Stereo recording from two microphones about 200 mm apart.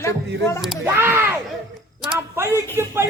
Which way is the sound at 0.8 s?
10° right (ahead or behind).